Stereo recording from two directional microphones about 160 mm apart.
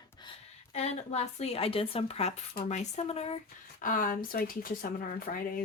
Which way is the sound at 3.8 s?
60° left (ahead or behind).